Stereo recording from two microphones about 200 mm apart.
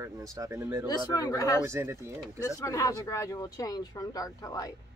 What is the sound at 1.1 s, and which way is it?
Speech, 20° left (ahead or behind).